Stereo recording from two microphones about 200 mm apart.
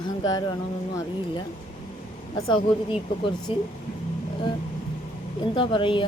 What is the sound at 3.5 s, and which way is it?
Speech, 25° left (ahead or behind).